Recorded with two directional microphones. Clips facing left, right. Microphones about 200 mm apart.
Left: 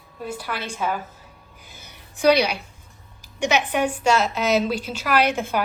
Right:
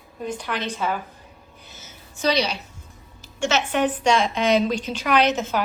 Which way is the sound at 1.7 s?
15° left (ahead or behind).